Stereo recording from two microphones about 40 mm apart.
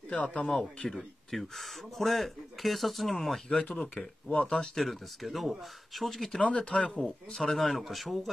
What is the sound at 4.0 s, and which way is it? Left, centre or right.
Speech, left.